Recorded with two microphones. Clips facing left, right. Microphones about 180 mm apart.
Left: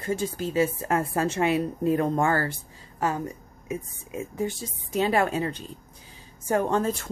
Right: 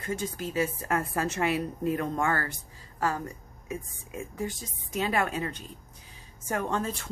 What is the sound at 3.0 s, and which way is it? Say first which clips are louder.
A woman's voice: left 3 dB; 20° left (ahead or behind).